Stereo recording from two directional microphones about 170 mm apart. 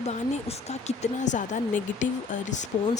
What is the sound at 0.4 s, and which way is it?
Speech, 40° left (ahead or behind).